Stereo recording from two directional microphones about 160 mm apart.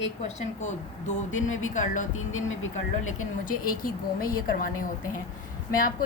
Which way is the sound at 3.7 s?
60° left (ahead or behind).